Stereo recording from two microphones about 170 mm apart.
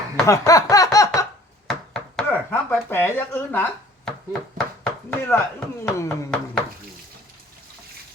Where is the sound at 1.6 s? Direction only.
5° left (ahead or behind).